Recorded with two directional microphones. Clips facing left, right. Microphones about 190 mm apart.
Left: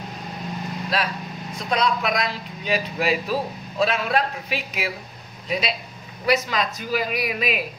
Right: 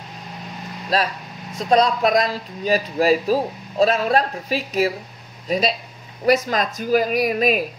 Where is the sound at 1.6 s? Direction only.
40° right (ahead or behind).